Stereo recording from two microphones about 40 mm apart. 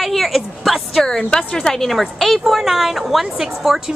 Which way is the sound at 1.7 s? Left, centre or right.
Centre.